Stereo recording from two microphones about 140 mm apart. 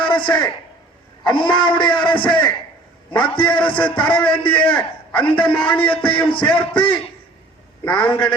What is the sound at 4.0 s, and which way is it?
Speech, 10° left (ahead or behind).